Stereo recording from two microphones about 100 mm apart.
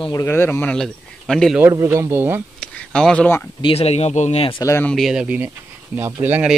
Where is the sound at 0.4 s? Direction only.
20° left (ahead or behind).